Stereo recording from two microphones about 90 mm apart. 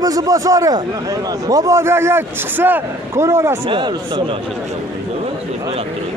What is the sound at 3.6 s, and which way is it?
Speech, 65° right (ahead or behind).